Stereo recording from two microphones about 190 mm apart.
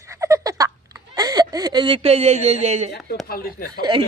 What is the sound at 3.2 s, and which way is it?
Speech, 50° left (ahead or behind).